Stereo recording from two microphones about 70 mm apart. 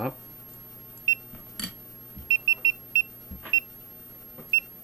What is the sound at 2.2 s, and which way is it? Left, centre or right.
Alarm clock, left.